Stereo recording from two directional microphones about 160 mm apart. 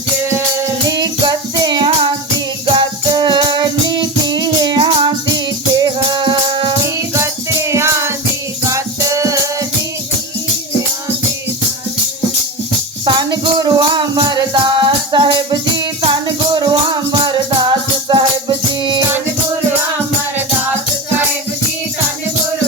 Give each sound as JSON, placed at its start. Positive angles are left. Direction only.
{"t": 0.9, "sound": "music", "side_deg": -25}
{"t": 6.8, "sound": "music", "side_deg": -20}
{"t": 13.1, "sound": "music", "side_deg": -30}